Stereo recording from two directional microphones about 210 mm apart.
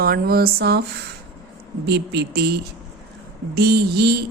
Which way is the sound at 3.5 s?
50° right (ahead or behind).